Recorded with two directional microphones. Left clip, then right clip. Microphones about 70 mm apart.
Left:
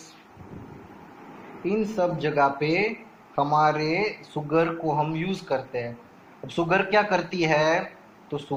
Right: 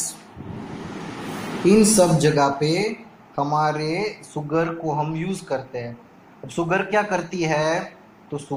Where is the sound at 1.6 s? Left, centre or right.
Left.